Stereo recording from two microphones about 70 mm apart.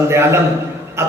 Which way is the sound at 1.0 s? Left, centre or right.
Right.